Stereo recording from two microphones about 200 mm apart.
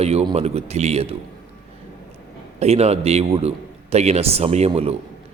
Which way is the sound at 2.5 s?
30° right (ahead or behind).